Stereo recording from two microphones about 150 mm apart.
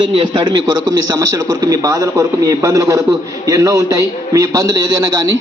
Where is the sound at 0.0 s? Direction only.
35° right (ahead or behind).